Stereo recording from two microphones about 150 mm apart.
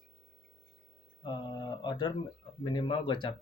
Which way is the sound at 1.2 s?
30° left (ahead or behind).